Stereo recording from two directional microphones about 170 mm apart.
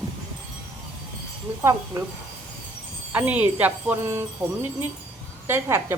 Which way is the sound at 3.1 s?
10° right (ahead or behind).